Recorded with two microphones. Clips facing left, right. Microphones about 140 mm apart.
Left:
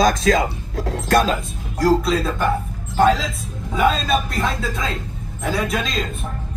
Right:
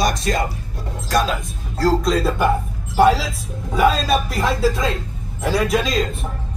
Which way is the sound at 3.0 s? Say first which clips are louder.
Right 2 dB; 10° right (ahead or behind).